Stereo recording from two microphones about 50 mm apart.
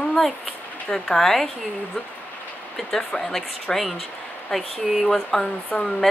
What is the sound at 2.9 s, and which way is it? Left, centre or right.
Speech, centre.